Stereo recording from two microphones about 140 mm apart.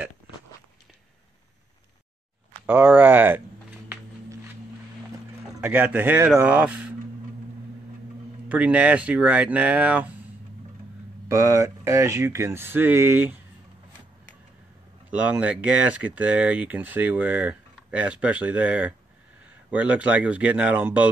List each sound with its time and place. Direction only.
2.6 s speech: 15° right (ahead or behind)
5.6 s speech: 10° right (ahead or behind)
8.5 s speech: 10° right (ahead or behind)
11.2 s speech: 20° right (ahead or behind)
15.0 s speech: 10° right (ahead or behind)